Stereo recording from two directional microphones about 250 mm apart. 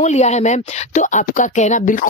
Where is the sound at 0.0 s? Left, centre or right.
Left.